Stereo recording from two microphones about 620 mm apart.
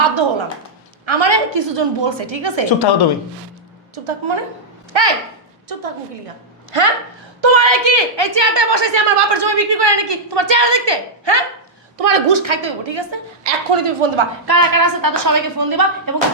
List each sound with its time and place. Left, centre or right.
0.0 s a sound: right
1.0 s a woman's voice: right
2.6 s a woman's voice: left
3.9 s a woman's voice: right
6.7 s a woman's voice: right
11.9 s a woman's voice: right
14.6 s a woman's voice: right